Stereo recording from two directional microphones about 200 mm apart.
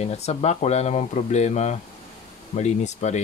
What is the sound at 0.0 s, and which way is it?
Speech, 30° left (ahead or behind).